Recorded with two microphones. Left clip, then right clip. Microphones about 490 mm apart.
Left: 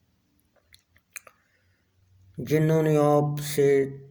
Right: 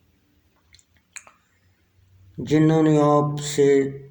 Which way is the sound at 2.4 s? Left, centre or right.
Left.